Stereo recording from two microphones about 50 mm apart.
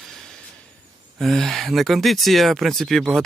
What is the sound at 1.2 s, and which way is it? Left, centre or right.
Speech, centre.